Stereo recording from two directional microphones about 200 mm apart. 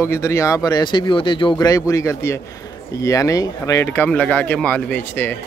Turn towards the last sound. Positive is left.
turn(degrees=10)  # may be behind; listen again after turning